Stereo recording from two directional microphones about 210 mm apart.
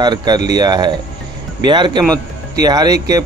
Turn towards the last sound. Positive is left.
turn(degrees=-15)  # may be behind; listen again after turning